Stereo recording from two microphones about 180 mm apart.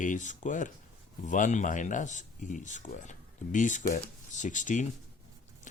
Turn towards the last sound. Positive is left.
turn(degrees=45)  # may be behind; listen again after turning